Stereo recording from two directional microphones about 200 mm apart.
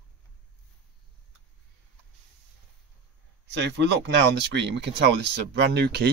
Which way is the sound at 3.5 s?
60° right (ahead or behind).